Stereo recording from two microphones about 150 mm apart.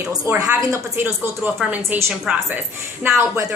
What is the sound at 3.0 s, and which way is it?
Speech, 15° right (ahead or behind).